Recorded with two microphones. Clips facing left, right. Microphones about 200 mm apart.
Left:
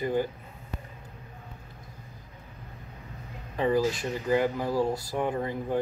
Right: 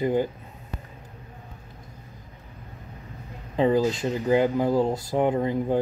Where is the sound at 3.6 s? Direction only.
20° right (ahead or behind).